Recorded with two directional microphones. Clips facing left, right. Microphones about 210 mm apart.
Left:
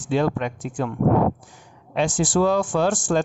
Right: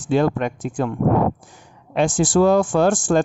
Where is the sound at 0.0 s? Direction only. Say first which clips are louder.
Right 3 dB; 45° right (ahead or behind).